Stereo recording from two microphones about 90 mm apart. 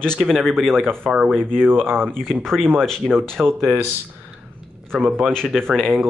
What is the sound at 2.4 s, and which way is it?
Speech, 5° left (ahead or behind).